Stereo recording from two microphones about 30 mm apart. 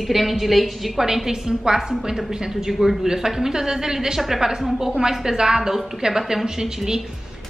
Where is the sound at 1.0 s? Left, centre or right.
Centre.